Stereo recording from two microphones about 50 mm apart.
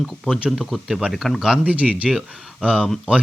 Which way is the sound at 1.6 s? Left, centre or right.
Right.